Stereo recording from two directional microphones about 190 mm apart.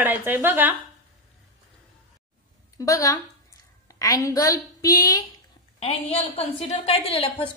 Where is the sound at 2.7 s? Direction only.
15° left (ahead or behind).